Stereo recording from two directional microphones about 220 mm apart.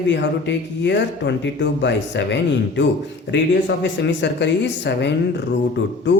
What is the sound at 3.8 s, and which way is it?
Speech, 50° left (ahead or behind).